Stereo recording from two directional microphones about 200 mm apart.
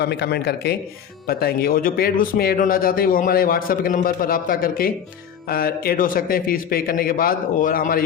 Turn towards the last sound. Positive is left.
turn(degrees=45)  # may be behind; listen again after turning